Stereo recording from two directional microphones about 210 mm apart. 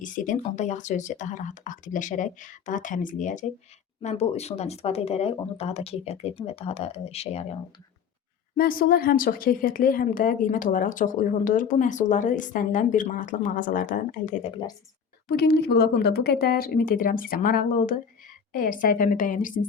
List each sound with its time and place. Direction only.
0.0 s a woman's voice: 40° left (ahead or behind)
8.5 s a woman's voice: 45° left (ahead or behind)
15.3 s speech: 45° left (ahead or behind)